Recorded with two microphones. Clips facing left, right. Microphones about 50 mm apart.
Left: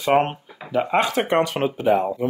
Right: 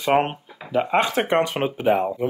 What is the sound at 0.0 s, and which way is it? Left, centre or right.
Speech, centre.